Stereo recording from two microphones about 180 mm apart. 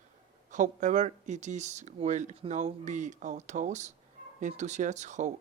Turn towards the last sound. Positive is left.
turn(degrees=-40)  # may be behind; listen again after turning